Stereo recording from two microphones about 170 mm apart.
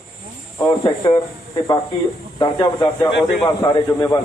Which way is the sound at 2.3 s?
30° left (ahead or behind).